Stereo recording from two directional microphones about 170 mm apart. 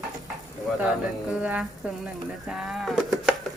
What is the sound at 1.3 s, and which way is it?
Speech, 5° right (ahead or behind).